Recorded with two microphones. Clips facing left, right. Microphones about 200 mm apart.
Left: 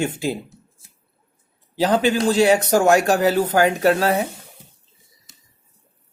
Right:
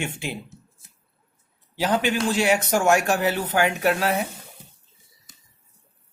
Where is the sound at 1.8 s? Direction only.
35° left (ahead or behind).